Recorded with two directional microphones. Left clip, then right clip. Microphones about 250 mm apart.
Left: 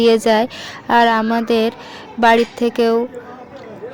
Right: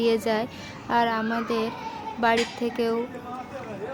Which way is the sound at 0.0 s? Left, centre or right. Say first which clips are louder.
Left 11 dB; left.